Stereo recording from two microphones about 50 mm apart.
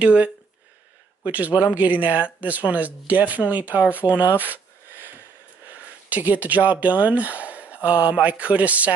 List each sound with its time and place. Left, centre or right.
0.0 s speech: right
6.0 s speech: right